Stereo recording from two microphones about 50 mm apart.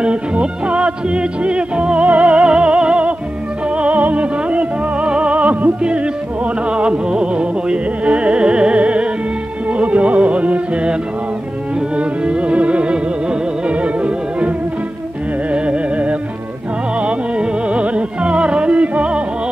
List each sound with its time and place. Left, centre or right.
0.0 s music: right
12.0 s music: right
15.5 s music: right